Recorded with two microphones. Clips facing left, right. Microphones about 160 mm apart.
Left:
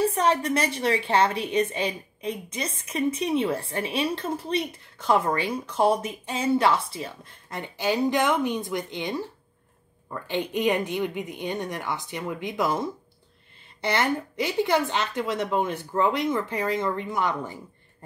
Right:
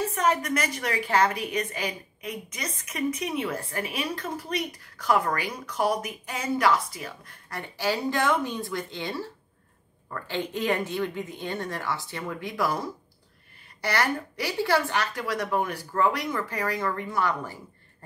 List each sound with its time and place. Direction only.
0.0 s a woman's voice: 30° left (ahead or behind)